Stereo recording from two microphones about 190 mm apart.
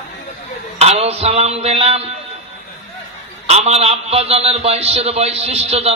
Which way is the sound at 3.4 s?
35° right (ahead or behind).